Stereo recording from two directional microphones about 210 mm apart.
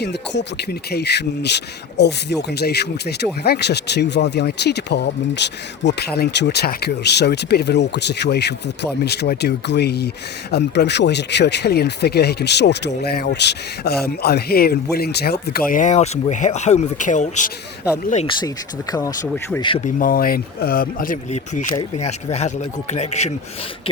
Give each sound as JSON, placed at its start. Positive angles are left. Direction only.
{"t": 0.0, "sound": "speech", "side_deg": 50}
{"t": 19.8, "sound": "speech", "side_deg": 40}